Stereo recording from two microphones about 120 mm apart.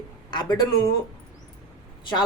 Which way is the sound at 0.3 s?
40° left (ahead or behind).